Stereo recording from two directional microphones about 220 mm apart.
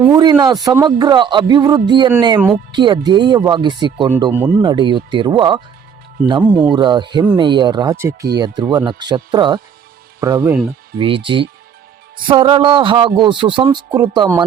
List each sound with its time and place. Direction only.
0.0 s speech: 20° right (ahead or behind)
4.6 s speech: 20° right (ahead or behind)
6.7 s speech: 20° right (ahead or behind)
10.9 s speech: 25° right (ahead or behind)